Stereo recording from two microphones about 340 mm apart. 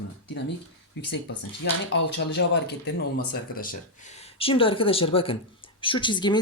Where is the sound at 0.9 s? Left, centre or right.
Left.